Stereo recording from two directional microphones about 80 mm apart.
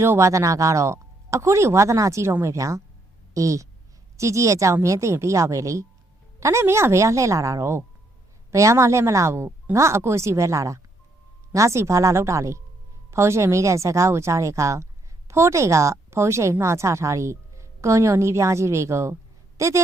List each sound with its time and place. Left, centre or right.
0.0 s a woman's voice: right